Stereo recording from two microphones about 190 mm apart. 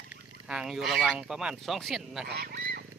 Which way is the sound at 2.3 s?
55° right (ahead or behind).